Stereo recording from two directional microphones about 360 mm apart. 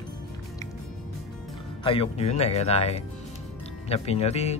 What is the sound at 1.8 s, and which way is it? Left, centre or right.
Speech, centre.